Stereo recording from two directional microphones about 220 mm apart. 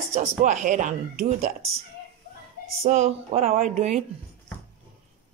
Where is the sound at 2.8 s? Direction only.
30° right (ahead or behind).